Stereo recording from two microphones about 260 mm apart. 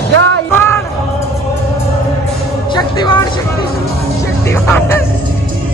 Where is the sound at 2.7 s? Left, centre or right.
Centre.